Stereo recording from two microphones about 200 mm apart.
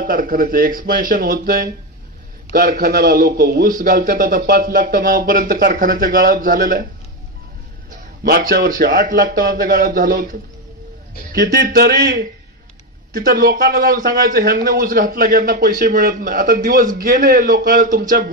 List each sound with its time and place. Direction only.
0.0 s a man's voice: 45° right (ahead or behind)
7.9 s a man's voice: 50° right (ahead or behind)
11.3 s a man's voice: 50° right (ahead or behind)